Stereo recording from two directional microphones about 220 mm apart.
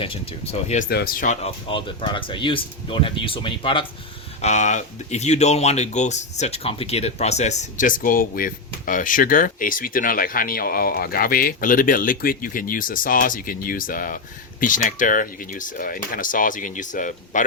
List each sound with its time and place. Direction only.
0.0 s speech: 25° left (ahead or behind)
0.9 s speech: 45° left (ahead or behind)
1.6 s speech: 25° left (ahead or behind)